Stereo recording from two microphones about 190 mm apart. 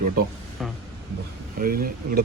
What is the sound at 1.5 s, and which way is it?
Speech, 50° right (ahead or behind).